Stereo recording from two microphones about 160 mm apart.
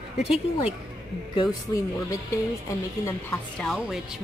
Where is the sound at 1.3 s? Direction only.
25° left (ahead or behind).